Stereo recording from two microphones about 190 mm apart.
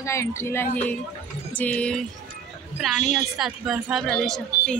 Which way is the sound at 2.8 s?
Centre (ahead or behind).